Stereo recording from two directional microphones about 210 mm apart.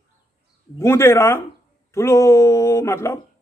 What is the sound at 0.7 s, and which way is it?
Speech, 10° left (ahead or behind).